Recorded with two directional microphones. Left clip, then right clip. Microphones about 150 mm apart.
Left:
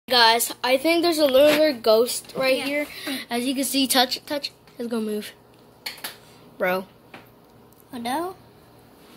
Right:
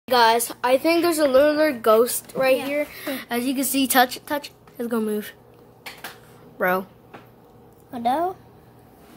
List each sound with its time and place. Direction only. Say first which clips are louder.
0.1 s a woman's voice: even; 10° right (ahead or behind)
6.6 s a woman's voice: right 2 dB; 5° right (ahead or behind)
7.9 s a woman's voice: right 5 dB; 30° right (ahead or behind)